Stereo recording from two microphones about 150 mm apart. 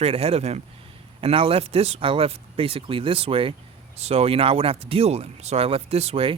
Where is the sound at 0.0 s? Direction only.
40° right (ahead or behind).